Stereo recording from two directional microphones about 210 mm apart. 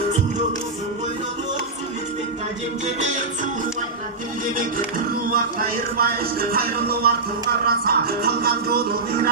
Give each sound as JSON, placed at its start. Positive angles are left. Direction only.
{"t": 3.0, "sound": "music", "side_deg": -35}
{"t": 5.3, "sound": "music", "side_deg": -45}